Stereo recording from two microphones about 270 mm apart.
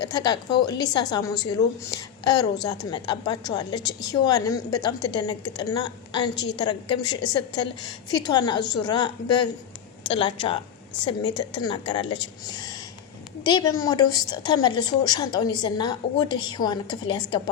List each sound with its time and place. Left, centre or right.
0.0 s a woman's voice: centre
6.3 s a woman's voice: left
6.6 s a woman's voice: centre
11.6 s a woman's voice: centre